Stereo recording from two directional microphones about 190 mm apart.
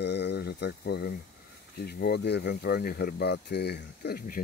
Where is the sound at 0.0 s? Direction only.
60° left (ahead or behind).